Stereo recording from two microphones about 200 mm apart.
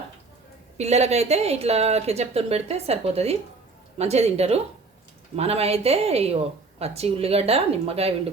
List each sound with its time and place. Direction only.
0.8 s speech: 35° right (ahead or behind)